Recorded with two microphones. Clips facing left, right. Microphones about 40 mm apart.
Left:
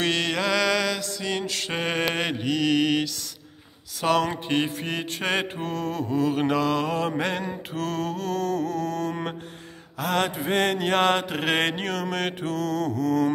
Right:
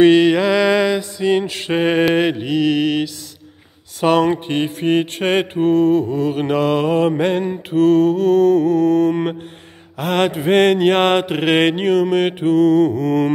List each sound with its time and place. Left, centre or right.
0.0 s mantra: centre
4.0 s mantra: right
4.7 s mantra: right
9.9 s mantra: right
11.8 s mantra: centre